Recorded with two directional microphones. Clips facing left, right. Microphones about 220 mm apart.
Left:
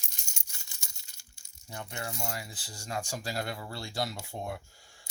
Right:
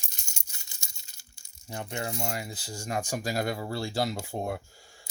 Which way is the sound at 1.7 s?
20° right (ahead or behind).